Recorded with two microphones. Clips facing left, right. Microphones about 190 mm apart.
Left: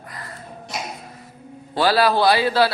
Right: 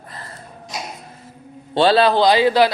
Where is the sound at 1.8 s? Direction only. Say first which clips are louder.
Right 3 dB; 25° right (ahead or behind).